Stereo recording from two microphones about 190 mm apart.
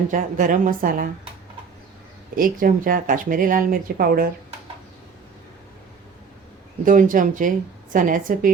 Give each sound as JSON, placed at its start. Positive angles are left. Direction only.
{"t": 0.1, "sound": "speech", "side_deg": -45}
{"t": 2.3, "sound": "speech", "side_deg": -45}
{"t": 6.8, "sound": "speech", "side_deg": -45}